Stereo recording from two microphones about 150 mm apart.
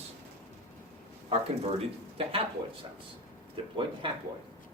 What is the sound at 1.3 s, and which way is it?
Speech, 40° right (ahead or behind).